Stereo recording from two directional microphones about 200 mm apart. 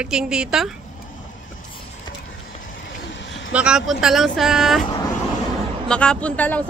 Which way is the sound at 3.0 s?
65° left (ahead or behind).